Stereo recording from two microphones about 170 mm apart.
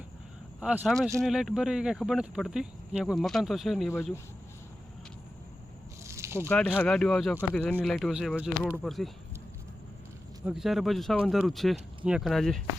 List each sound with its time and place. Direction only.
0.6 s speech: 5° right (ahead or behind)
6.1 s a sound: 15° right (ahead or behind)
6.5 s speech: 10° left (ahead or behind)
10.4 s speech: centre (ahead or behind)